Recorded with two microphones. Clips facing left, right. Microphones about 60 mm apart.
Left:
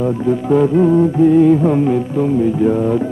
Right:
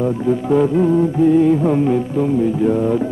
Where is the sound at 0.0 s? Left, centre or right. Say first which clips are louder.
Left 1 dB; centre.